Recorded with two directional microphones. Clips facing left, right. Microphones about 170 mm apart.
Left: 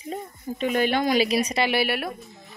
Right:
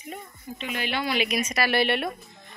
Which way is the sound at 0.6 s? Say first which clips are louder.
Left 8 dB; 45° left (ahead or behind).